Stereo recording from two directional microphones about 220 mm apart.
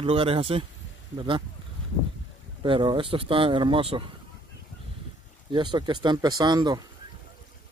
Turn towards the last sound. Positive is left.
turn(degrees=-20)  # may be behind; listen again after turning